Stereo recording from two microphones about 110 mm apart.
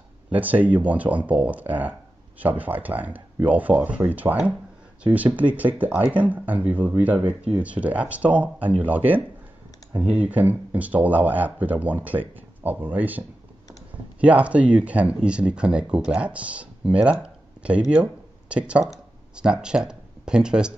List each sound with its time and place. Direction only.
0.3 s speech: 15° right (ahead or behind)
14.2 s speech: 10° right (ahead or behind)